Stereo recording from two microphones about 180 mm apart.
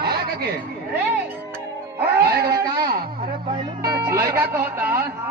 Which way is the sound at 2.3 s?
60° right (ahead or behind).